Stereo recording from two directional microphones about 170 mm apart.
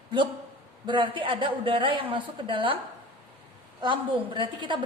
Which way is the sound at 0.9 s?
30° right (ahead or behind).